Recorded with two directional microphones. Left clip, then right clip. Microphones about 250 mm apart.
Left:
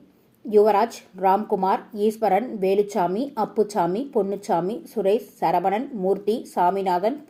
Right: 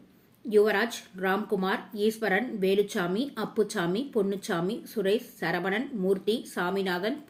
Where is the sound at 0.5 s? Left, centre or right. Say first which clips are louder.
Left 6 dB; centre.